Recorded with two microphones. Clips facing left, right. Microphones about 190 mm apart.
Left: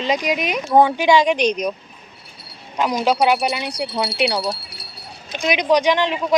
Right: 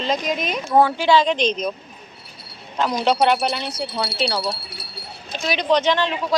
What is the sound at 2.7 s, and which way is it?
Speech, 10° left (ahead or behind).